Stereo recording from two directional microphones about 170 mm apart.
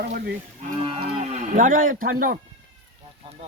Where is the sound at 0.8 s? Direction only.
30° right (ahead or behind); by 2.4 s 55° right (ahead or behind).